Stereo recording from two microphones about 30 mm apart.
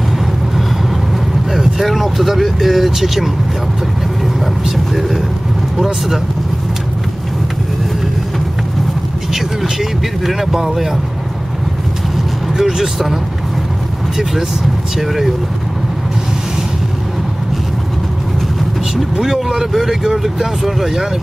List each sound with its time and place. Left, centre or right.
1.5 s speech: centre
4.6 s speech: centre
9.3 s speech: centre
12.5 s speech: centre
15.0 s speech: centre
19.1 s speech: centre